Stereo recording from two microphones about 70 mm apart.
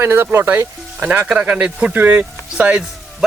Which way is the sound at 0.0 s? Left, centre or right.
Right.